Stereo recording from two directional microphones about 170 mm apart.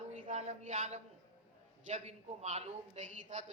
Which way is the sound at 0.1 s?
45° right (ahead or behind).